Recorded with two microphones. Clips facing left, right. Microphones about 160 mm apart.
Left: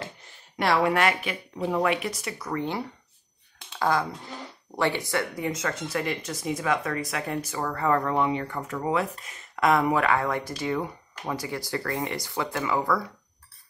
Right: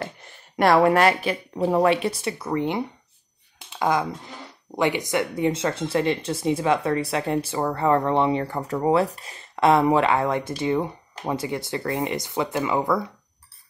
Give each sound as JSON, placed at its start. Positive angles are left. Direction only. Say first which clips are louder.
{"t": 0.6, "sound": "speech", "louder": "right 6 dB", "side_deg": -50}